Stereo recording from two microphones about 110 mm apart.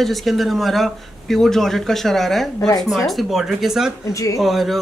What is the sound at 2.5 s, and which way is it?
Speech, 35° left (ahead or behind).